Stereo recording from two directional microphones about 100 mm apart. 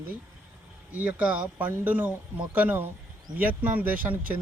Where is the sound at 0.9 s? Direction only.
15° right (ahead or behind).